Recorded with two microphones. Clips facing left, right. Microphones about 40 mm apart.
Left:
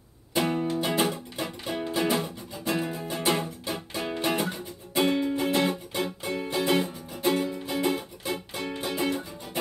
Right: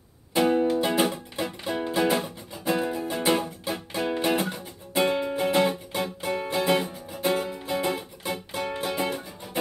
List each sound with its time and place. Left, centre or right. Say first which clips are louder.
0.3 s music: right 5 dB; centre